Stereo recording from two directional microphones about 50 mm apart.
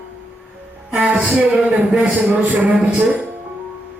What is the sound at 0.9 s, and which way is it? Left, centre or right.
Music, right.